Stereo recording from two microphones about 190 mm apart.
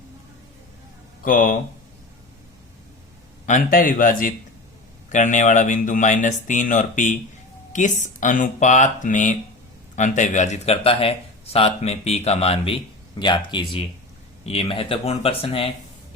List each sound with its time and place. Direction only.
1.2 s speech: 45° left (ahead or behind)
3.4 s a man's voice: 45° left (ahead or behind); by 15.7 s 30° left (ahead or behind)